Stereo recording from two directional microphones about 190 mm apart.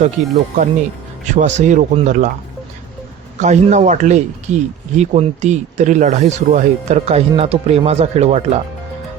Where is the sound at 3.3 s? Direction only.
40° right (ahead or behind).